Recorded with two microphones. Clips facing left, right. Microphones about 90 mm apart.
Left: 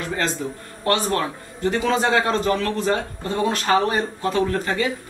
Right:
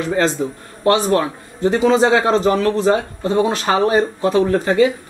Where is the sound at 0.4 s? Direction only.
15° right (ahead or behind).